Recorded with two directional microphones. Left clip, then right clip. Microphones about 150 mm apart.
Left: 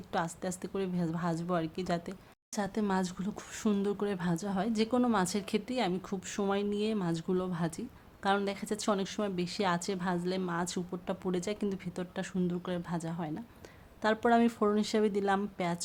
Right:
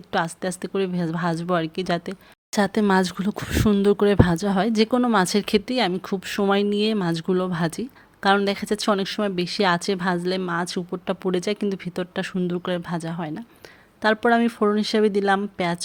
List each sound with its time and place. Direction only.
0.1 s speech: 30° right (ahead or behind)
2.5 s speech: 50° right (ahead or behind); by 15.8 s 30° right (ahead or behind)